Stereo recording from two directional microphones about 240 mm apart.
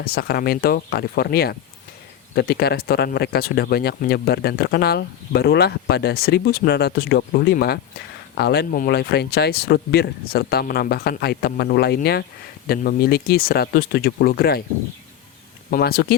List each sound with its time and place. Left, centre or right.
0.0 s speech: left
15.7 s speech: left